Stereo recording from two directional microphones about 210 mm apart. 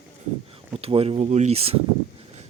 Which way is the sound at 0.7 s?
25° right (ahead or behind).